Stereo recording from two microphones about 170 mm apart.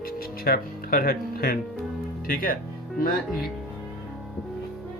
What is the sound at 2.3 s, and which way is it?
Music, 55° left (ahead or behind).